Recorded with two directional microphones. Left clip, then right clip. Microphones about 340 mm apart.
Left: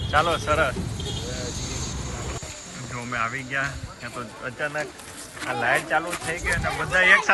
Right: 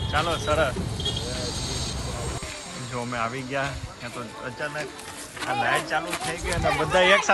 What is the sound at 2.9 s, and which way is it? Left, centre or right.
Speech, centre.